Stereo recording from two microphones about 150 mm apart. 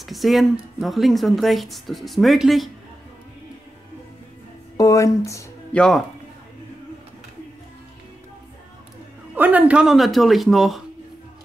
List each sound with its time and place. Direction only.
0.0 s speech: centre (ahead or behind)
4.7 s speech: 20° left (ahead or behind)
5.7 s speech: 5° left (ahead or behind)
9.3 s speech: 10° right (ahead or behind)